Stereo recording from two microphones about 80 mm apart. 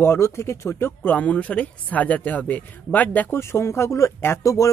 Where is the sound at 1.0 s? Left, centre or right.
Centre.